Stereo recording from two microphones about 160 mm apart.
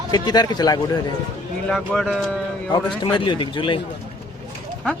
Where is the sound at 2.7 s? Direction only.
30° left (ahead or behind).